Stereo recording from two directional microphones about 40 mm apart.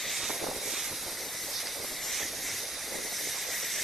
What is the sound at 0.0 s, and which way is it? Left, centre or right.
Hiss, centre.